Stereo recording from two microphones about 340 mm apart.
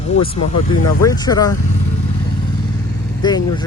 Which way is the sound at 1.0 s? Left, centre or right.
Centre.